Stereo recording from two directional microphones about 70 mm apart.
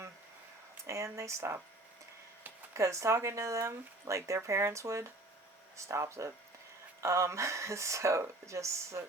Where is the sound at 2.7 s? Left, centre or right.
Right.